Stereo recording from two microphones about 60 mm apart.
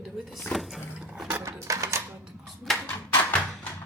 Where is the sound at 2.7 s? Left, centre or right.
Centre.